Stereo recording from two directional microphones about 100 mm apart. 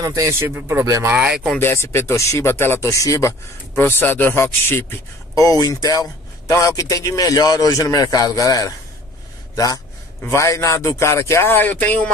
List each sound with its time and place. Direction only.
0.0 s speech: 35° right (ahead or behind)
1.1 s speech: 15° right (ahead or behind)
1.6 s speech: 25° left (ahead or behind)
5.3 s a man's voice: 35° left (ahead or behind)
10.2 s speech: 30° left (ahead or behind); by 12.1 s 15° left (ahead or behind)